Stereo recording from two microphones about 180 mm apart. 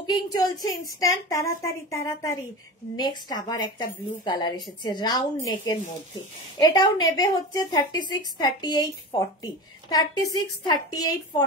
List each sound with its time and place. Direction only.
0.0 s a woman's voice: 20° left (ahead or behind)